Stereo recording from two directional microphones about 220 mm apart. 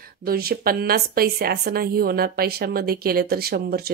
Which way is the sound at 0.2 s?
45° right (ahead or behind).